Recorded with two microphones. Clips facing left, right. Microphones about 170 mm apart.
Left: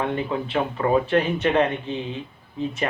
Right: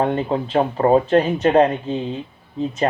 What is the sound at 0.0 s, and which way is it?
Speech, 40° right (ahead or behind).